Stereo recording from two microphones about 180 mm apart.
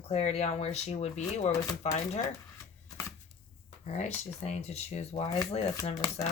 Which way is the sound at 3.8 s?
40° left (ahead or behind).